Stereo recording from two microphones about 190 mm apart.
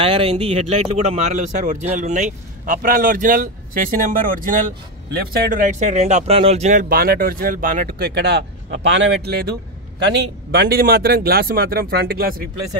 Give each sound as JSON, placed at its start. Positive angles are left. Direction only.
{"t": 0.0, "sound": "speech", "side_deg": -30}